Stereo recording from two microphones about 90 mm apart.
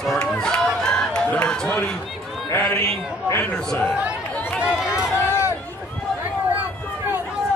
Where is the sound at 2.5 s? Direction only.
30° left (ahead or behind).